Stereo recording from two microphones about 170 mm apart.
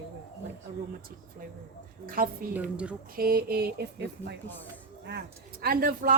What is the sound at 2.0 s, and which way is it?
Speech, 55° right (ahead or behind).